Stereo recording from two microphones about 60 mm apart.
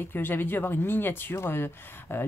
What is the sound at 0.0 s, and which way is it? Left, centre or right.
Speech, left.